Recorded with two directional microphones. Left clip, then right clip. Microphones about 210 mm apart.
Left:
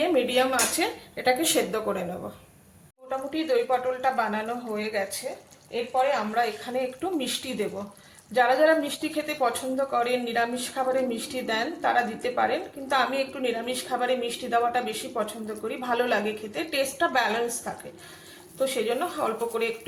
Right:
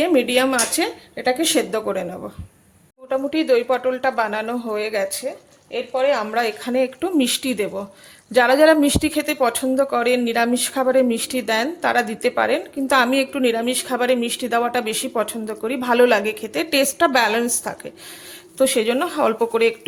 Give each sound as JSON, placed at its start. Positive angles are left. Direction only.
{"t": 0.0, "sound": "a woman's voice", "side_deg": -45}
{"t": 3.1, "sound": "a woman's voice", "side_deg": -50}